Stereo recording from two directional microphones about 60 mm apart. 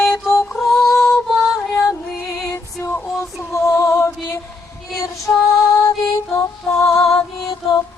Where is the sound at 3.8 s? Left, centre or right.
Left.